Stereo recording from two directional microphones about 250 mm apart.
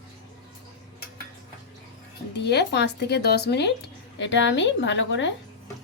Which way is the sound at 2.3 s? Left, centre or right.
Left.